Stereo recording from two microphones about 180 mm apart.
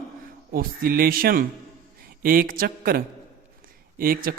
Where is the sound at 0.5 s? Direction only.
55° right (ahead or behind).